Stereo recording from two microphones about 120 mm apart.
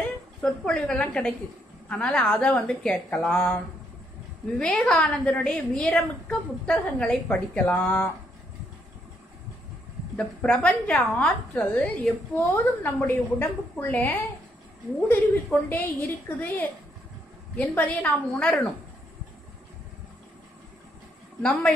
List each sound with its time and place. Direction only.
0.4 s a woman's voice: 5° left (ahead or behind)
4.6 s a woman's voice: 5° left (ahead or behind)
10.1 s a woman's voice: 10° left (ahead or behind)
15.7 s a woman's voice: 15° left (ahead or behind)
21.4 s a woman's voice: 10° left (ahead or behind)